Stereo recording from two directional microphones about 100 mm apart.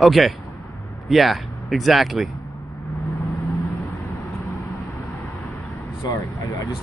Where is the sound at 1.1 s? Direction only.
Centre (ahead or behind).